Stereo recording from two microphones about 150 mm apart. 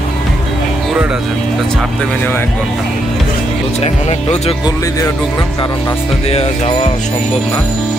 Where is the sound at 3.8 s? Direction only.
45° left (ahead or behind).